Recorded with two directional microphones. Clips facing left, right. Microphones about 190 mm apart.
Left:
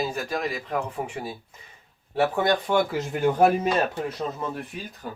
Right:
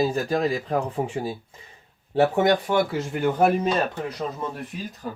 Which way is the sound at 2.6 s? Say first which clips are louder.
Even; 5° right (ahead or behind).